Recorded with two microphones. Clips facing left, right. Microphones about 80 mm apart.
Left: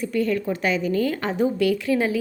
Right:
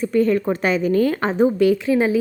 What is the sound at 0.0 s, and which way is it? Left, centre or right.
A woman's voice, right.